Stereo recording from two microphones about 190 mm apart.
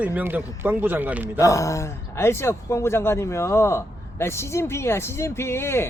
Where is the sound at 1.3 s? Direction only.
15° left (ahead or behind).